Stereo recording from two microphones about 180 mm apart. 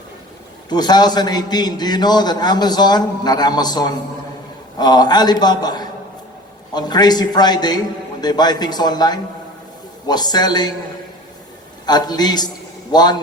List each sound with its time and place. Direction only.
0.7 s a man's voice: 25° left (ahead or behind)
11.9 s a man's voice: 20° left (ahead or behind)